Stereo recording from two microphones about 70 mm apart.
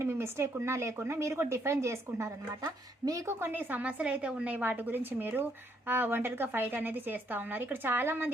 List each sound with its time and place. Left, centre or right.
0.0 s speech: right
3.2 s a woman's voice: right